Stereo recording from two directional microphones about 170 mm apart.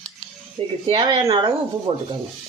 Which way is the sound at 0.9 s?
25° right (ahead or behind).